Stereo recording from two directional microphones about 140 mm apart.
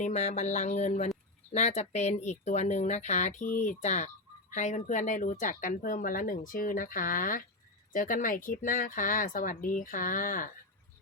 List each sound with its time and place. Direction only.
0.0 s speech: 55° left (ahead or behind); by 10.5 s 75° left (ahead or behind)